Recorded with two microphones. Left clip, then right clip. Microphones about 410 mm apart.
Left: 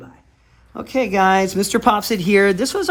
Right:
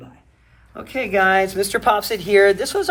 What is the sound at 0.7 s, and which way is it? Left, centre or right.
Speech, centre.